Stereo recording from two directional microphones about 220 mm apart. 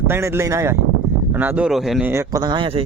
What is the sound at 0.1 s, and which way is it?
Speech, 15° right (ahead or behind).